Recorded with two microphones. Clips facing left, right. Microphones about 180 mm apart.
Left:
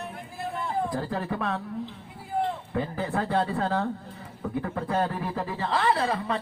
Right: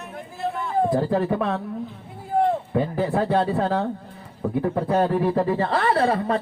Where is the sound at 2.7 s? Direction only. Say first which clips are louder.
Right 6 dB; 25° right (ahead or behind); by 6.4 s 40° right (ahead or behind).